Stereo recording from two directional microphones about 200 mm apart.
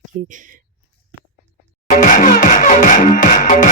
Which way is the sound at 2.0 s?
40° left (ahead or behind).